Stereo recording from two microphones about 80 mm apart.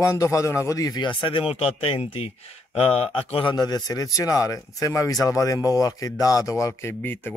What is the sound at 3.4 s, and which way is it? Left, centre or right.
Speech, left.